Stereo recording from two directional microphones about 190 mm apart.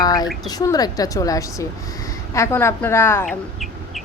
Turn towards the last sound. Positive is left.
turn(degrees=15)  # may be behind; listen again after turning